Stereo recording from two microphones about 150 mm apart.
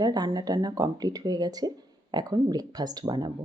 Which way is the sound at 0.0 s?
25° right (ahead or behind).